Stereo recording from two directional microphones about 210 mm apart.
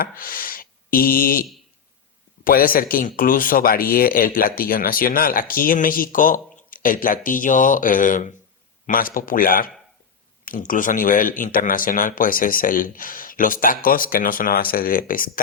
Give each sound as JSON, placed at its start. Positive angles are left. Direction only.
{"t": 0.0, "sound": "speech", "side_deg": 45}